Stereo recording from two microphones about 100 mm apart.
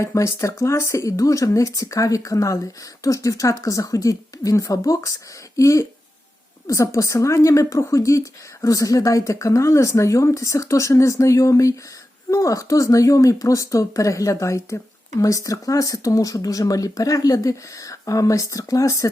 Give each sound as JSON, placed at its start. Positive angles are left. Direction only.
{"t": 0.0, "sound": "speech", "side_deg": 30}